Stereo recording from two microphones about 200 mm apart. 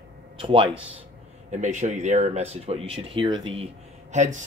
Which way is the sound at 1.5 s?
35° right (ahead or behind).